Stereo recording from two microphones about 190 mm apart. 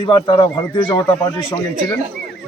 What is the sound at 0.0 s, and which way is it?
A man's voice, 20° left (ahead or behind).